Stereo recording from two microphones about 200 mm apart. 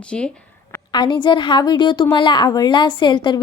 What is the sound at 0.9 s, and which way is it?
Speech, 20° left (ahead or behind).